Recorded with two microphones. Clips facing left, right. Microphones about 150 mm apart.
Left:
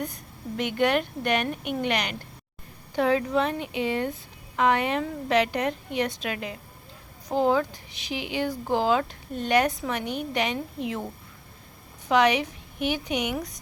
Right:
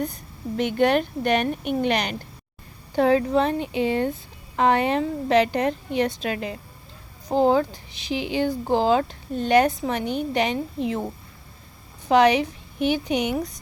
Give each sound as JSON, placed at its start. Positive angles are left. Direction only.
{"t": 0.0, "sound": "speech", "side_deg": -35}